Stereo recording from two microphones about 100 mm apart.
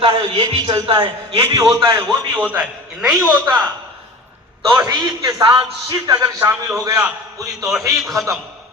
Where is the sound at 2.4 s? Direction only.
15° right (ahead or behind).